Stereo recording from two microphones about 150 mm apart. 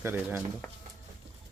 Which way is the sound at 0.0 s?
15° right (ahead or behind).